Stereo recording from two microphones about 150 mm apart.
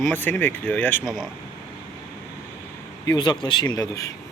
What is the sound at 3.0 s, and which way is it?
Speech, 30° left (ahead or behind).